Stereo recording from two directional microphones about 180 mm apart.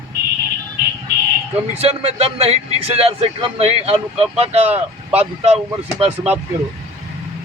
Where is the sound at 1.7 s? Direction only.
35° right (ahead or behind).